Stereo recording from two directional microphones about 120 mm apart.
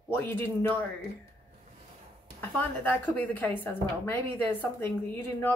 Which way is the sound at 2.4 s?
15° left (ahead or behind).